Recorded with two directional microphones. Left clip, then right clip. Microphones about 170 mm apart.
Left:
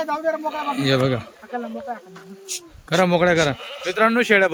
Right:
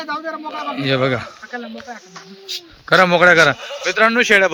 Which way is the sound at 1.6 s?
45° left (ahead or behind).